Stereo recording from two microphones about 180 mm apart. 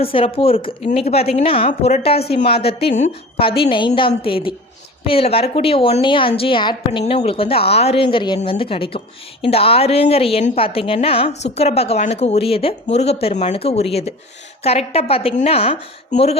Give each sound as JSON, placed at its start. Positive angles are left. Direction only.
{"t": 0.0, "sound": "a woman's voice", "side_deg": 30}